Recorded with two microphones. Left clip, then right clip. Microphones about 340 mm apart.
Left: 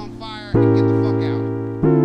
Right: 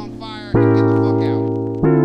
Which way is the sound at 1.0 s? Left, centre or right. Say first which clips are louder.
Right 3 dB; centre.